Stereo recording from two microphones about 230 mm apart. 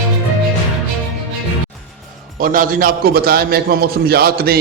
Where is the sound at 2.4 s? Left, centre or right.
Right.